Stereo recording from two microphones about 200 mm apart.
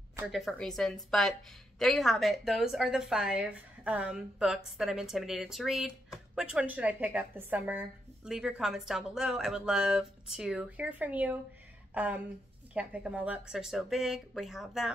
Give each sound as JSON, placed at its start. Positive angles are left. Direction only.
{"t": 0.3, "sound": "a woman's voice", "side_deg": 0}